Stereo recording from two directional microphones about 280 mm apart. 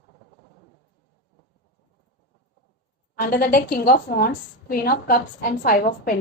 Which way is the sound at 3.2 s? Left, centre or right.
Left.